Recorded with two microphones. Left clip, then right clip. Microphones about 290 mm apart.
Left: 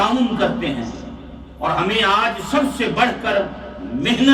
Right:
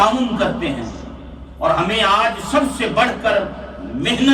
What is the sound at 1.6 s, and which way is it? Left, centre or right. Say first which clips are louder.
A man's voice: right 2 dB; centre.